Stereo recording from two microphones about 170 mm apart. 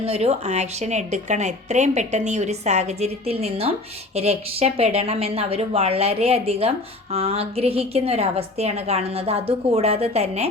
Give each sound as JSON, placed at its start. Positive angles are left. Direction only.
{"t": 0.0, "sound": "speech", "side_deg": -40}